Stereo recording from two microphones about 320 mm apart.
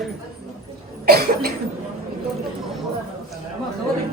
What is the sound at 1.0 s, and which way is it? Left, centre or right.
Cough, right.